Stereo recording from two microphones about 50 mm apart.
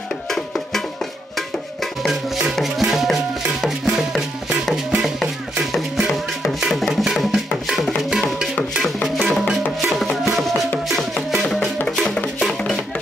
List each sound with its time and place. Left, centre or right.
2.8 s music: centre
5.0 s music: centre
8.1 s music: centre
9.8 s music: centre